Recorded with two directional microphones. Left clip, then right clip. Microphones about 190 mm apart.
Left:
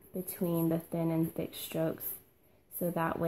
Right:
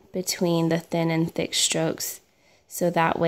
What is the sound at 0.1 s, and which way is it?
A woman's voice, 40° right (ahead or behind).